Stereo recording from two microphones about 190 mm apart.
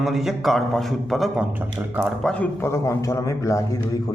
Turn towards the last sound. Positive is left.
turn(degrees=15)  # may be behind; listen again after turning